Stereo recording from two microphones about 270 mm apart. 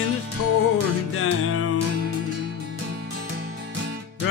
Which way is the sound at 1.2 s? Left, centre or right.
Left.